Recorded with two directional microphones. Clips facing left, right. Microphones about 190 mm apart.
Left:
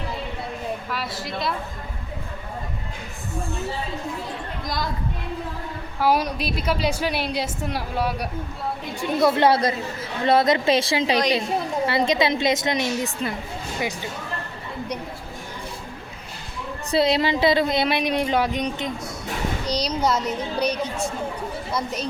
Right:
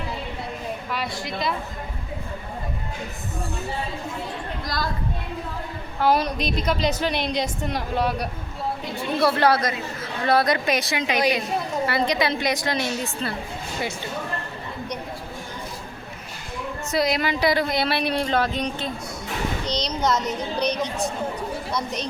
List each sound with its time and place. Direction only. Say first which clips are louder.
0.9 s speech: right 1 dB; centre (ahead or behind)
4.6 s a woman's voice: left 1 dB; 20° left (ahead or behind)
6.0 s a woman's voice: even; 10° left (ahead or behind)
9.2 s a woman's voice: left 2 dB; 20° left (ahead or behind)
16.9 s a woman's voice: left 3 dB; 30° left (ahead or behind)
19.6 s a sound: left 2 dB; 10° left (ahead or behind)
20.2 s a woman's voice: left 1 dB; 5° left (ahead or behind)